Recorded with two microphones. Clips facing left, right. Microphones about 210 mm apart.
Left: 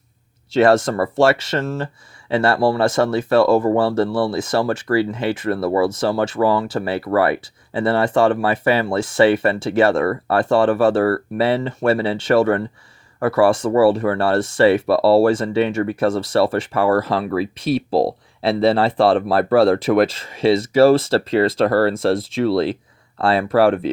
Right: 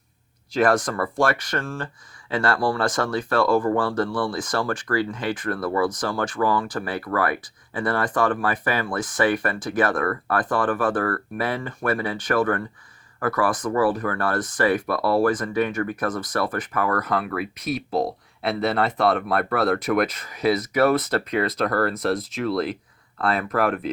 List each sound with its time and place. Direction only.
0.5 s speech: 25° left (ahead or behind)